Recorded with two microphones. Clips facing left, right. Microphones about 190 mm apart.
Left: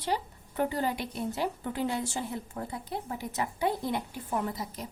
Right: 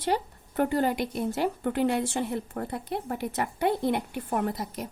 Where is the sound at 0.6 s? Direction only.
55° right (ahead or behind).